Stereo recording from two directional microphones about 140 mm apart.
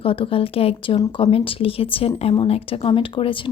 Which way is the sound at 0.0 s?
40° left (ahead or behind).